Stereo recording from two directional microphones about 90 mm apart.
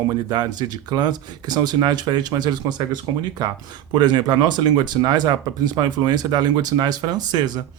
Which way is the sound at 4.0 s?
55° right (ahead or behind).